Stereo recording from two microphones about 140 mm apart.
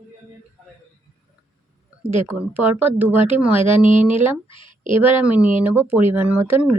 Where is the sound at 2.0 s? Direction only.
15° right (ahead or behind).